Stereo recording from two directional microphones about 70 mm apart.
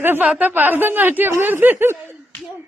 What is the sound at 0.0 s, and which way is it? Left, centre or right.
Child singing, right.